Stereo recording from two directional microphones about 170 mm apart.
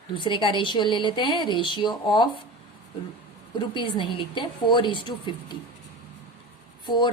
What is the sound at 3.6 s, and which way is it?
Speech, 30° left (ahead or behind).